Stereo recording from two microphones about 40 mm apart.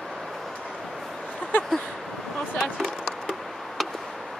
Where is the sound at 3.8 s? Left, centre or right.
Centre.